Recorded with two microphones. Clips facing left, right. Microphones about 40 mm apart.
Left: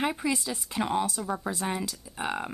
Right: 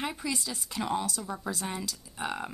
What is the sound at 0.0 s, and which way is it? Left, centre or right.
Speech, left.